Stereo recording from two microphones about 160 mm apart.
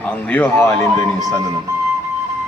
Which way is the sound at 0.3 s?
10° left (ahead or behind).